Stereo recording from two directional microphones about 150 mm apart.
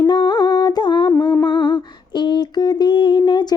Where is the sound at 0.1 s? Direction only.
30° left (ahead or behind).